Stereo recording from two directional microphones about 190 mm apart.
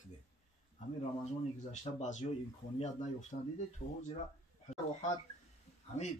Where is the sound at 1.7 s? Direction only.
40° left (ahead or behind).